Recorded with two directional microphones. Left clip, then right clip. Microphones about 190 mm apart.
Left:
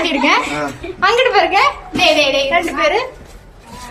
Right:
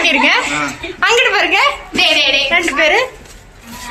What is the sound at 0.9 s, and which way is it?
A woman's voice, 20° right (ahead or behind).